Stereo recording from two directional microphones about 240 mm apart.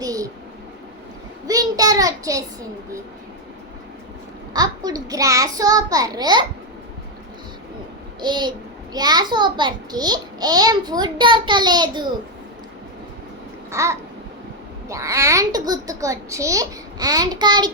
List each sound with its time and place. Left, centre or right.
0.0 s a sound: centre
1.5 s child singing: centre
4.5 s a child's voice: centre
8.2 s a child's voice: centre
13.7 s babbling: centre
14.8 s a child's voice: centre